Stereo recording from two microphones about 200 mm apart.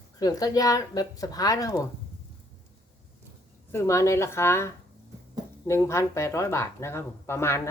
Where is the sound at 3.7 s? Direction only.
15° left (ahead or behind).